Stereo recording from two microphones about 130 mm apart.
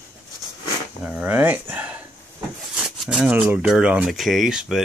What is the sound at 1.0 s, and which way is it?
Speech, 10° right (ahead or behind).